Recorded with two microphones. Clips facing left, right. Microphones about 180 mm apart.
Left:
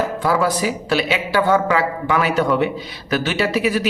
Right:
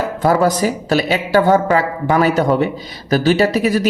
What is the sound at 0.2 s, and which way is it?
A woman's voice, 40° right (ahead or behind).